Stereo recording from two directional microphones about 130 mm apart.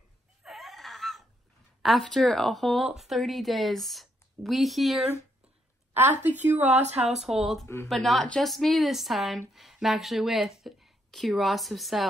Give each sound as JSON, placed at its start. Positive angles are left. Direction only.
{"t": 0.4, "sound": "a sound", "side_deg": 0}
{"t": 1.8, "sound": "speech", "side_deg": 0}
{"t": 5.9, "sound": "a woman's voice", "side_deg": -15}
{"t": 6.6, "sound": "speech", "side_deg": -60}
{"t": 7.0, "sound": "speech", "side_deg": -5}
{"t": 7.6, "sound": "speech", "side_deg": 20}
{"t": 7.9, "sound": "speech", "side_deg": 0}